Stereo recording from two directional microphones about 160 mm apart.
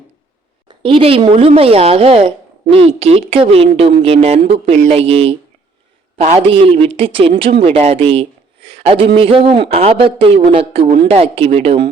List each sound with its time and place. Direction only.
0.7 s a man's voice: 35° right (ahead or behind)